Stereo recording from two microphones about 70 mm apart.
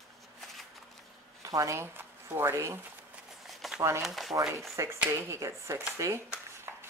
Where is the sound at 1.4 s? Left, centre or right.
Right.